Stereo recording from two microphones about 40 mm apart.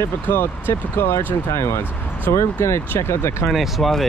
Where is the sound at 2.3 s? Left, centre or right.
Left.